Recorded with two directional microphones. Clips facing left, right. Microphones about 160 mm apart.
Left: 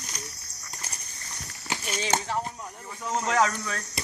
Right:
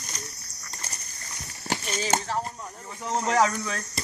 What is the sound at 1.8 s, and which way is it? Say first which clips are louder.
Speech: even; centre (ahead or behind).